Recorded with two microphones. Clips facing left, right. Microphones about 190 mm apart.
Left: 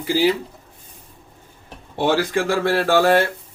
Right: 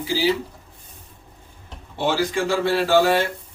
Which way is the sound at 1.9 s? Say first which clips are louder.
Left 3 dB; 55° left (ahead or behind).